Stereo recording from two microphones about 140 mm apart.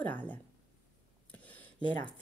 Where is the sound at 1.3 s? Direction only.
10° left (ahead or behind).